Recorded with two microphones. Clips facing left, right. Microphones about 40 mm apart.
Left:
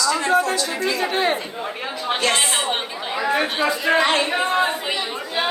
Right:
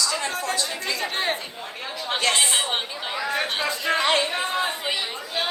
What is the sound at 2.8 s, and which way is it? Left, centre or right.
Chatter, left.